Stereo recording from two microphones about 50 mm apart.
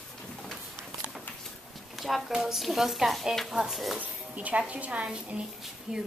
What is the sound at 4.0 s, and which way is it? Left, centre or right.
Speech, right.